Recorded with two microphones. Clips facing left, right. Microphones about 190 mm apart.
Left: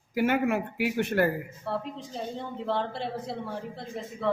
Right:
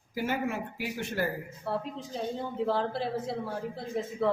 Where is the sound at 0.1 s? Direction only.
65° left (ahead or behind).